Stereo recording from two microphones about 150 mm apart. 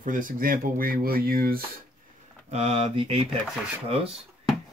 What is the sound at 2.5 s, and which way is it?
Speech, 40° right (ahead or behind).